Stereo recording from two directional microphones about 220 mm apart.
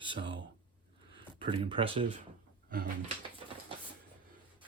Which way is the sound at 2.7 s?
40° right (ahead or behind).